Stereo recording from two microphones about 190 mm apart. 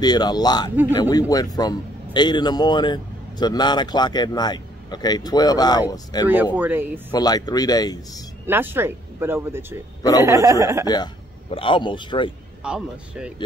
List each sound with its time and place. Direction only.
0.0 s a man's voice: 20° left (ahead or behind)
6.2 s speech: 10° right (ahead or behind)
7.1 s a man's voice: 20° left (ahead or behind)
8.5 s speech: 10° right (ahead or behind)
11.5 s a man's voice: 25° left (ahead or behind)
12.6 s speech: 5° right (ahead or behind)